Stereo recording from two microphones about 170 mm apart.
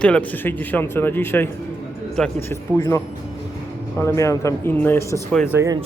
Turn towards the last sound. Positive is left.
turn(degrees=-20)  # may be behind; listen again after turning